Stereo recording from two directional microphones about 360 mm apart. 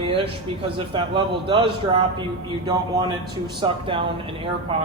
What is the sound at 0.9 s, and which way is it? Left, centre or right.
A man's voice, centre.